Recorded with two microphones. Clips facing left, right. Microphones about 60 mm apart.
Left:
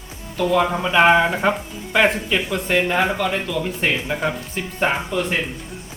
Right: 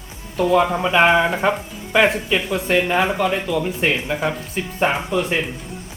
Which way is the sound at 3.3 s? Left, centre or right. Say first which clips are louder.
Right 2 dB; centre.